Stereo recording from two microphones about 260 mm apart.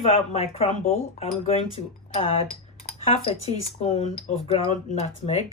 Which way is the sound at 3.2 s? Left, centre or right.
Left.